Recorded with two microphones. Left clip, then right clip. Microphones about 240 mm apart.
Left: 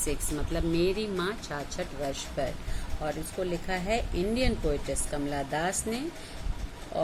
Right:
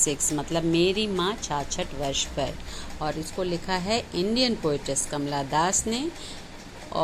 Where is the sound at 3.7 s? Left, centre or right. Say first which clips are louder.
Right 4 dB; centre.